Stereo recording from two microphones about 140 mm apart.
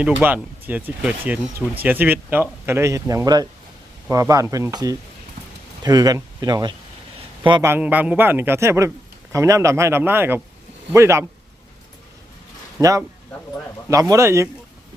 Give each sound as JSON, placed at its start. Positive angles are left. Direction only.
{"t": 0.0, "sound": "a man's voice", "side_deg": -10}
{"t": 7.6, "sound": "a man's voice", "side_deg": -15}
{"t": 12.8, "sound": "a man's voice", "side_deg": -25}